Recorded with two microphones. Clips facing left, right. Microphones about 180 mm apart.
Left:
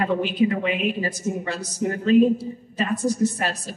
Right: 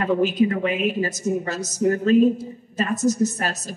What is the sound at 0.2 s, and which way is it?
Speech, 45° right (ahead or behind).